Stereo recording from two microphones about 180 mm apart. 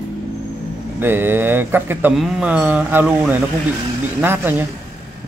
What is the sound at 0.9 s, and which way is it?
Speech, 10° right (ahead or behind).